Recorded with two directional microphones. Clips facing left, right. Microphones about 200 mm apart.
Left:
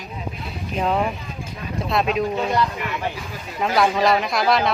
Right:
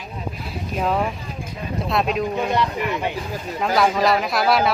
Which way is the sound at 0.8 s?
Centre (ahead or behind).